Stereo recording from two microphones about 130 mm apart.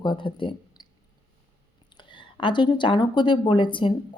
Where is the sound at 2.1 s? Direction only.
40° left (ahead or behind).